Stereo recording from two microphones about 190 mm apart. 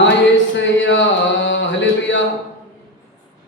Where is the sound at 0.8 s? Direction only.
70° left (ahead or behind).